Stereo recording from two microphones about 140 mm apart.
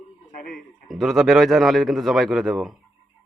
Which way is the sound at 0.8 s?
Centre (ahead or behind).